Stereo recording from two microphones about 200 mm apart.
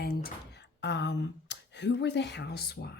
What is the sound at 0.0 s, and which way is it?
Speech, 50° left (ahead or behind).